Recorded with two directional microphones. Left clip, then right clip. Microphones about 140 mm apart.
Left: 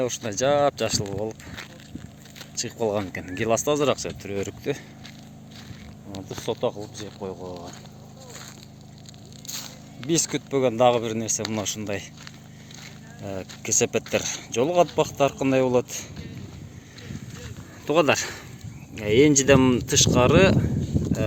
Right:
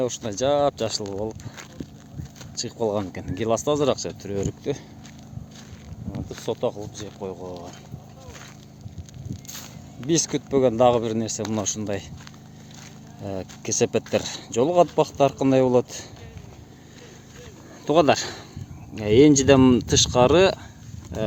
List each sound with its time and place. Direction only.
0.0 s speech: 20° right (ahead or behind)
2.6 s speech: 25° right (ahead or behind)
6.2 s a sound: 10° right (ahead or behind)
6.9 s speech: 5° right (ahead or behind)
7.4 s speech: 15° left (ahead or behind)
9.5 s a sound: centre (ahead or behind)
10.1 s speech: 45° right (ahead or behind)
13.2 s speech: 40° right (ahead or behind)
17.8 s speech: 35° right (ahead or behind)